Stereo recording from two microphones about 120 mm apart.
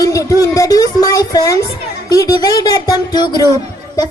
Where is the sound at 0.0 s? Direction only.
30° left (ahead or behind).